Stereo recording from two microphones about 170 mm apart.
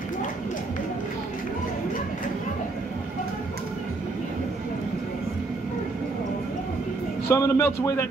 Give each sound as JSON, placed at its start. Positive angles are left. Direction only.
{"t": 7.2, "sound": "a man's voice", "side_deg": 15}